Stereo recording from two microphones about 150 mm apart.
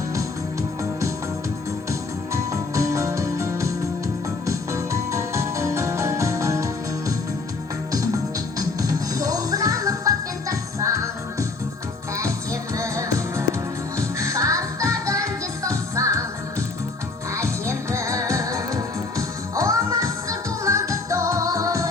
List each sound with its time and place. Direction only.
1.9 s music: 20° right (ahead or behind)
7.9 s music: 25° right (ahead or behind)